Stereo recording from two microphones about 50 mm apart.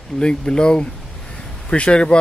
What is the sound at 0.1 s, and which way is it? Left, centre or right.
Speech, centre.